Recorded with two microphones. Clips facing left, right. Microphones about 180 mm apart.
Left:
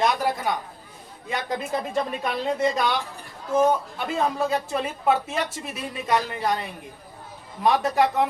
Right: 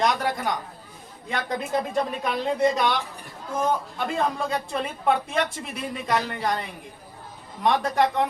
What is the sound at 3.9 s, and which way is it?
Speech, 5° left (ahead or behind).